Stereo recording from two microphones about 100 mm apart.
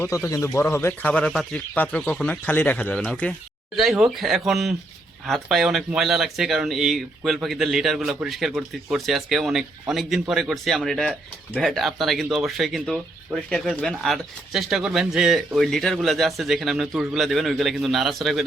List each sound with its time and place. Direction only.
0.0 s speech: 30° left (ahead or behind); by 3.3 s 10° left (ahead or behind)
3.8 s a man's voice: 5° right (ahead or behind)